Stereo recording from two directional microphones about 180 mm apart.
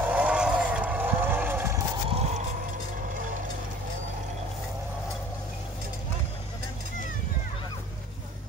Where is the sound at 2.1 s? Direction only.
35° right (ahead or behind).